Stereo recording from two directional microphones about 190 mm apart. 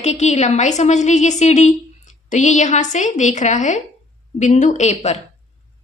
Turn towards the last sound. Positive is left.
turn(degrees=35)  # may be behind; listen again after turning